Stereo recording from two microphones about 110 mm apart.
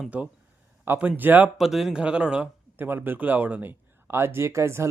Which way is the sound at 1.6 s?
Centre (ahead or behind).